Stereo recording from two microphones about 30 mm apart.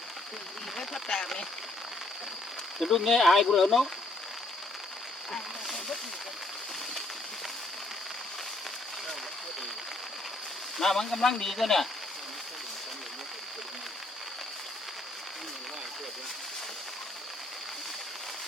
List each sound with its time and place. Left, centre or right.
0.8 s a sound: centre
2.7 s speech: centre
10.8 s speech: centre